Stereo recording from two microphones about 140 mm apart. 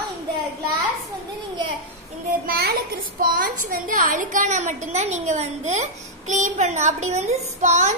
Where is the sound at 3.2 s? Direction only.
85° right.